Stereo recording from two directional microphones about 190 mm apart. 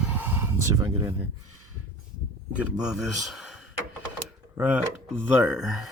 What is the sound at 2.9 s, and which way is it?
A man's voice, centre (ahead or behind).